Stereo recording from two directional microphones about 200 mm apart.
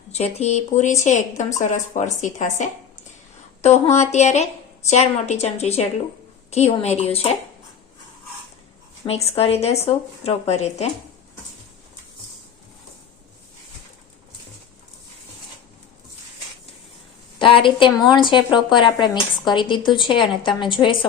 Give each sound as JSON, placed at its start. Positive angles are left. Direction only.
{"t": 0.1, "sound": "a woman's voice", "side_deg": 30}
{"t": 9.0, "sound": "a woman's voice", "side_deg": 30}
{"t": 17.4, "sound": "speech", "side_deg": 25}